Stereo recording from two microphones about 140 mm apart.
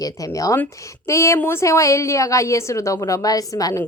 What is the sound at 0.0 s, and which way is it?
Speech, 25° left (ahead or behind).